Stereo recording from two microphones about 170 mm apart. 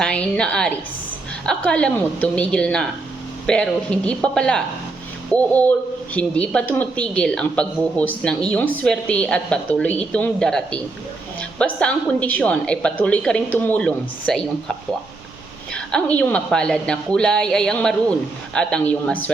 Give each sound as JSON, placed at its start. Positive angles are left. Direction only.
{"t": 0.0, "sound": "a woman's voice", "side_deg": 5}